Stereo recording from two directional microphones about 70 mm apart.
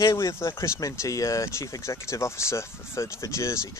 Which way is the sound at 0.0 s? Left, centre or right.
Left.